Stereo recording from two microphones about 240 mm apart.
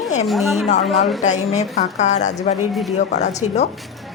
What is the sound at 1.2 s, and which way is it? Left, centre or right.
A woman's voice, left.